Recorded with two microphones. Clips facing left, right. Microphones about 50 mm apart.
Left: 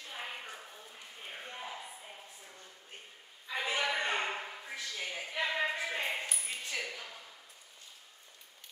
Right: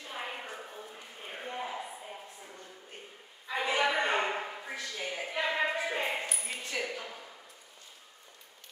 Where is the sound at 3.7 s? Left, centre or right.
Centre.